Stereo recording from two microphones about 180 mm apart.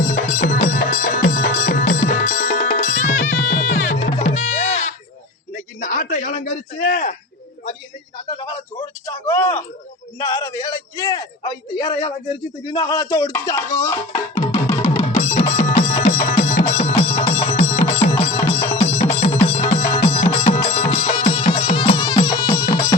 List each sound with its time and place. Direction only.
0.1 s music: 45° left (ahead or behind)
2.5 s music: 35° left (ahead or behind)
2.8 s music: 45° left (ahead or behind)
5.5 s a sound: 45° left (ahead or behind)
9.0 s a sound: 10° left (ahead or behind)
10.2 s a man's voice: 15° left (ahead or behind)
15.2 s music: 40° left (ahead or behind)